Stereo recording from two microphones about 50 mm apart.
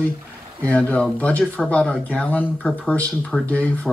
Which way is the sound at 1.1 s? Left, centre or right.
Left.